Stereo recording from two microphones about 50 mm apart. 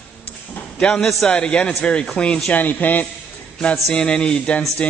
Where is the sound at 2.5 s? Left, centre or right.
Left.